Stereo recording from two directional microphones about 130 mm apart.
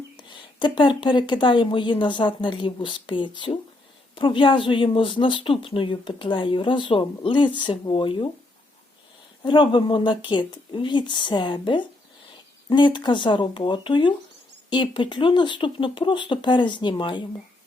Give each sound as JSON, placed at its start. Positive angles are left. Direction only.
{"t": 0.2, "sound": "speech", "side_deg": 40}
{"t": 9.4, "sound": "speech", "side_deg": 40}